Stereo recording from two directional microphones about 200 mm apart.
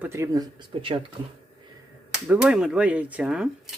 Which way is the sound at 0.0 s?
15° right (ahead or behind).